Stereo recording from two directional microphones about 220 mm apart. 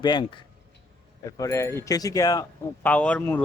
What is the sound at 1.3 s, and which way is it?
A man's voice, 15° left (ahead or behind).